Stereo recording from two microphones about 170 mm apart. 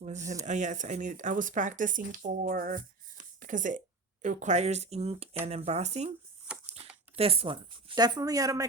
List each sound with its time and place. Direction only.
0.0 s speech: 45° right (ahead or behind)
7.2 s a woman's voice: 35° right (ahead or behind); by 8.6 s 20° right (ahead or behind)